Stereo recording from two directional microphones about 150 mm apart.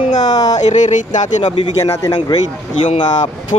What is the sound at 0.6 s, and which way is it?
Speech, 50° left (ahead or behind).